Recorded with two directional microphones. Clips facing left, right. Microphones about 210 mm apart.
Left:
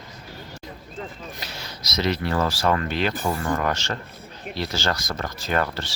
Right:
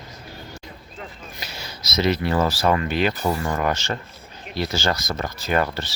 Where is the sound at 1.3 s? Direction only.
5° right (ahead or behind).